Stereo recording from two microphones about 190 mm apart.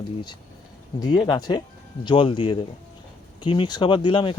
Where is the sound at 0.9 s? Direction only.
20° left (ahead or behind).